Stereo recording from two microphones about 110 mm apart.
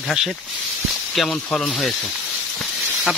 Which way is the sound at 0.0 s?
Centre (ahead or behind).